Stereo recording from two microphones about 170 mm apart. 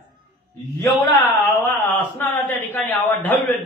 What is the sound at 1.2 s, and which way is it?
A man's voice, 15° left (ahead or behind).